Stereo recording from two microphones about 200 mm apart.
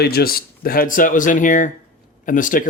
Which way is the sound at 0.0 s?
50° left (ahead or behind).